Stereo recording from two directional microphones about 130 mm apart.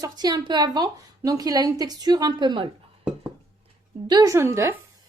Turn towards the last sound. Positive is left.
turn(degrees=-20)  # may be behind; listen again after turning